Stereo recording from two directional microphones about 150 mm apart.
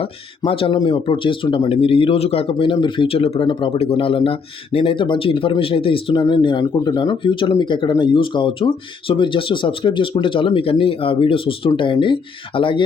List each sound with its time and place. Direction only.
0.0 s speech: 40° left (ahead or behind)